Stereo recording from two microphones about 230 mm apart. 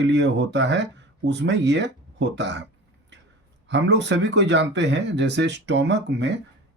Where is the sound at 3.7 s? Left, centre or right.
Right.